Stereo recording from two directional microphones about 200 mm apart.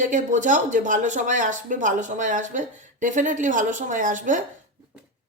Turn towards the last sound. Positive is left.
turn(degrees=-40)  # may be behind; listen again after turning